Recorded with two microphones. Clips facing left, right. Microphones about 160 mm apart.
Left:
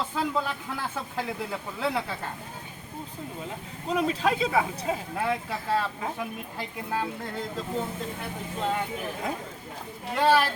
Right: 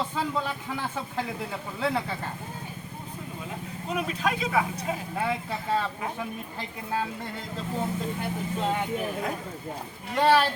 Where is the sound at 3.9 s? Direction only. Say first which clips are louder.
Left 4 dB; 30° left (ahead or behind).